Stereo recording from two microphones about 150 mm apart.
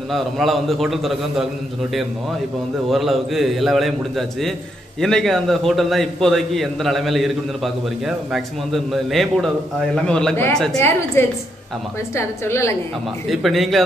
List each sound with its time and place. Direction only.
0.1 s a man's voice: centre (ahead or behind)
2.9 s a man's voice: centre (ahead or behind)
11.2 s a woman's voice: 15° left (ahead or behind)
13.3 s a man's voice: centre (ahead or behind)